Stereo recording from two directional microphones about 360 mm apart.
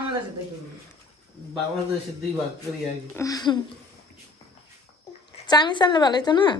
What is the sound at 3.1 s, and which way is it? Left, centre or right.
Speech, centre.